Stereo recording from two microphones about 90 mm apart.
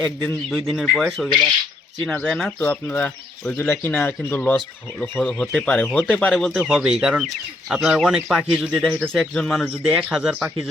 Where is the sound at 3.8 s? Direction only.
25° left (ahead or behind).